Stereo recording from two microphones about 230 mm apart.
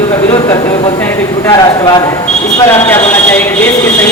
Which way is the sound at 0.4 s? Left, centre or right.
Centre.